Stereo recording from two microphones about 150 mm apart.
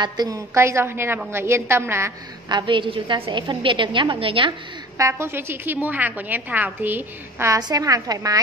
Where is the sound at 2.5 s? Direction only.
30° right (ahead or behind).